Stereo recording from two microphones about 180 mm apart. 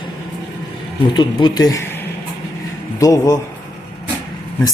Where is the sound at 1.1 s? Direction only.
25° left (ahead or behind).